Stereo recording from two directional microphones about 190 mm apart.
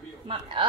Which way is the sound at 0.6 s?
25° right (ahead or behind).